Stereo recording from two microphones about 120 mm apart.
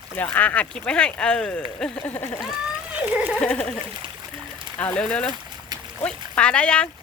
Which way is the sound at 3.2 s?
10° right (ahead or behind).